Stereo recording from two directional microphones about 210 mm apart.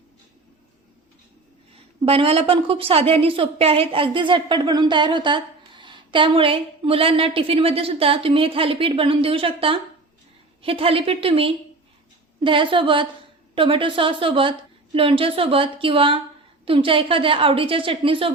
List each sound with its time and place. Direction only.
1.7 s a woman's voice: 25° right (ahead or behind)